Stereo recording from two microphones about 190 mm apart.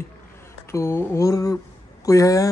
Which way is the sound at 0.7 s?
15° left (ahead or behind).